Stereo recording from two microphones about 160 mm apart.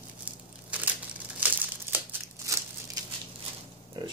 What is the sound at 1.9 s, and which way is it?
Crumpling, 15° right (ahead or behind).